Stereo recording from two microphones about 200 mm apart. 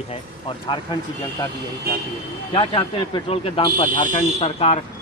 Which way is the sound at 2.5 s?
25° left (ahead or behind).